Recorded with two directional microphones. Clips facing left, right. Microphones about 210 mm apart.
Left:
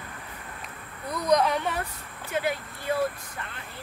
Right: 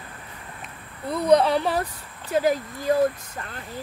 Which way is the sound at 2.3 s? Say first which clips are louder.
Right 7 dB; 40° right (ahead or behind).